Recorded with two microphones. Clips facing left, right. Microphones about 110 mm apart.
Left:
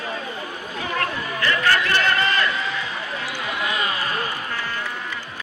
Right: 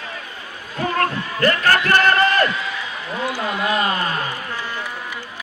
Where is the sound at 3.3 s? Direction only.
40° right (ahead or behind).